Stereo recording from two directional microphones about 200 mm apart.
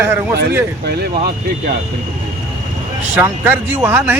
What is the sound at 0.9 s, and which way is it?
Speech, 55° right (ahead or behind).